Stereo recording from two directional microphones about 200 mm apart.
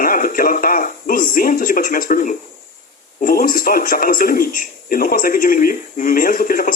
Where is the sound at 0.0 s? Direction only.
45° left (ahead or behind).